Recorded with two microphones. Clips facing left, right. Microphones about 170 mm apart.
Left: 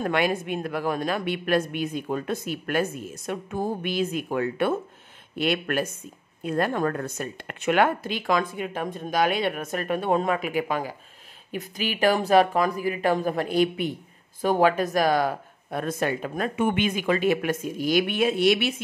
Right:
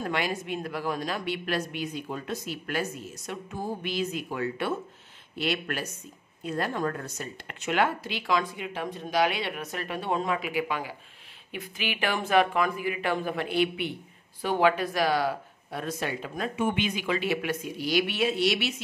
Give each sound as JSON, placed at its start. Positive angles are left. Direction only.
{"t": 0.0, "sound": "speech", "side_deg": 55}